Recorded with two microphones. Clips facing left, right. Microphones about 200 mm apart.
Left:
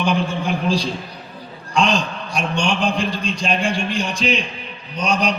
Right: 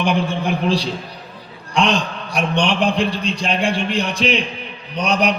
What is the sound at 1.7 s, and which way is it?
A man's voice, 65° right (ahead or behind).